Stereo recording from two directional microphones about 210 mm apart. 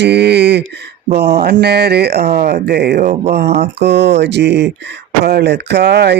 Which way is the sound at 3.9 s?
55° right (ahead or behind).